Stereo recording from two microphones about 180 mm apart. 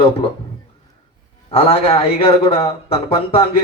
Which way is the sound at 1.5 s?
30° left (ahead or behind).